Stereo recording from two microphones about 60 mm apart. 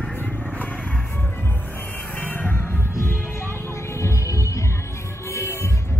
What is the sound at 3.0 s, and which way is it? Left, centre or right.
Music, left.